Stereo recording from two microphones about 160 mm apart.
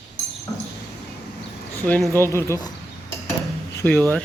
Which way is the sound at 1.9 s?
10° left (ahead or behind).